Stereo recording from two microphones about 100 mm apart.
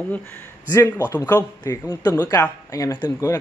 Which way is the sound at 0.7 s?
30° left (ahead or behind).